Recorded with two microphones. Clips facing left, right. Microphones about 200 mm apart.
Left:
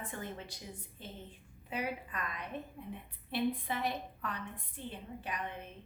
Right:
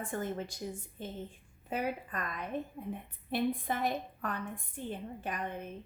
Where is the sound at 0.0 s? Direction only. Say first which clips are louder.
Right 7 dB; 45° right (ahead or behind).